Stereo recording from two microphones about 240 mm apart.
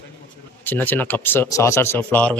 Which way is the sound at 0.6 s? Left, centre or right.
Centre.